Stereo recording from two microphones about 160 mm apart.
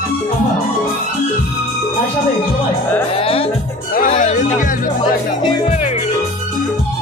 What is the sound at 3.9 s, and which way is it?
Music, 55° left (ahead or behind).